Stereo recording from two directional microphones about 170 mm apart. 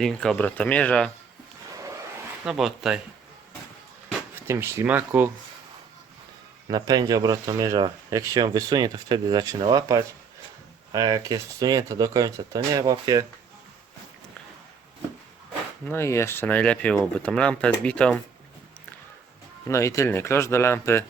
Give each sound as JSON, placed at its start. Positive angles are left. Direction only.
{"t": 0.0, "sound": "speech", "side_deg": 5}
{"t": 2.4, "sound": "speech", "side_deg": -5}
{"t": 4.4, "sound": "speech", "side_deg": -15}
{"t": 6.7, "sound": "speech", "side_deg": -25}
{"t": 15.9, "sound": "speech", "side_deg": 15}
{"t": 19.6, "sound": "speech", "side_deg": 15}